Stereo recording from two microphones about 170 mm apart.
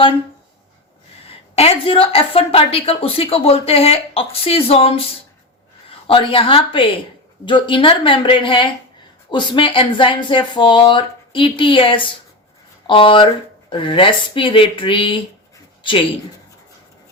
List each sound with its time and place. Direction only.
1.5 s a woman's voice: 35° left (ahead or behind)